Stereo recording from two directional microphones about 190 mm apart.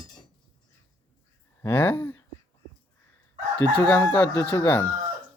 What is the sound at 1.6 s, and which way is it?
Speech, 10° left (ahead or behind).